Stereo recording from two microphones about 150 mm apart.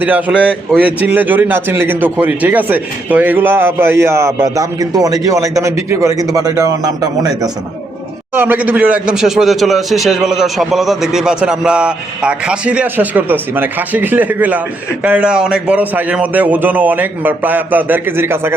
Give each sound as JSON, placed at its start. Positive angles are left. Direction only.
{"t": 0.0, "sound": "a man's voice", "side_deg": -10}
{"t": 8.3, "sound": "a man's voice", "side_deg": -15}